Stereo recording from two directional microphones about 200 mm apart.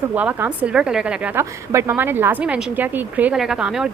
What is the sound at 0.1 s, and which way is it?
A woman's voice, 5° right (ahead or behind).